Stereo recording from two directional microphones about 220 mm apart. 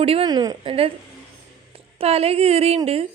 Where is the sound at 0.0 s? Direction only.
25° right (ahead or behind).